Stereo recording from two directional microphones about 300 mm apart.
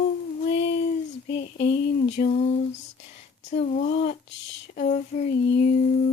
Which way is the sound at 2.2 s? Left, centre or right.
Left.